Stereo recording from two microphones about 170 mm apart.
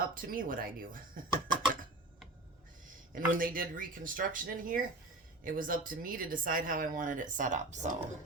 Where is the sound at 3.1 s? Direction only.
55° right (ahead or behind).